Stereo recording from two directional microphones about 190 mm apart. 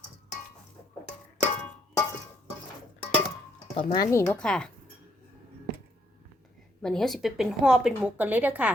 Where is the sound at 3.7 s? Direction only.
20° left (ahead or behind).